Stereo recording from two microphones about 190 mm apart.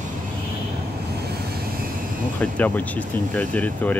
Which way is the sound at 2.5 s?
10° left (ahead or behind).